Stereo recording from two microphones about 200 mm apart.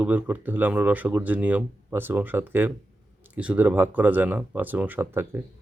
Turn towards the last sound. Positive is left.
turn(degrees=-10)  # may be behind; listen again after turning